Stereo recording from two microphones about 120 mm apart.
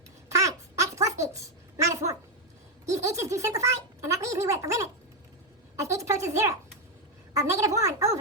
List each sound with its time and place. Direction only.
0.3 s babbling: 25° right (ahead or behind)
0.9 s a child's voice: 25° right (ahead or behind)
5.9 s speech: 25° right (ahead or behind)